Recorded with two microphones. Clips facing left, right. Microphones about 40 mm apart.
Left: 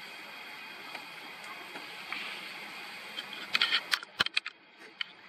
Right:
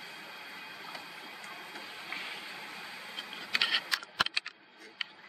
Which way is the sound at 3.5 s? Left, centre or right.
Left.